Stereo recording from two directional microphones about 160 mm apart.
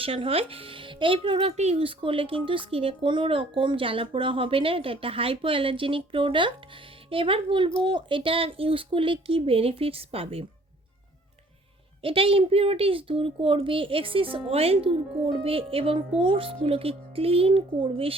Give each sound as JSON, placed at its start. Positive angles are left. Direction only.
{"t": 0.0, "sound": "speech", "side_deg": -35}
{"t": 12.0, "sound": "speech", "side_deg": -35}